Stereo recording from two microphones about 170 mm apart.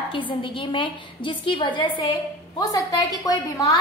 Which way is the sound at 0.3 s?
30° left (ahead or behind).